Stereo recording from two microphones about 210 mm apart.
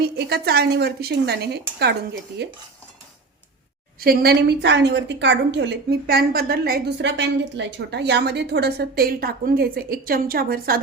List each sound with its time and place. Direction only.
0.0 s a woman's voice: 50° right (ahead or behind)
4.0 s a woman's voice: 45° right (ahead or behind)